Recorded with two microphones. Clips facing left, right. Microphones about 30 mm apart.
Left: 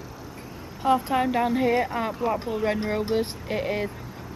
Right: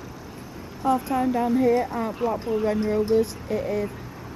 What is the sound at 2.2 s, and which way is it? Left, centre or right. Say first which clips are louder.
Speech: right 3 dB; left.